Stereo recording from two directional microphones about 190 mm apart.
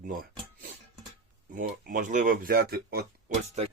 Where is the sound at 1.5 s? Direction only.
45° right (ahead or behind).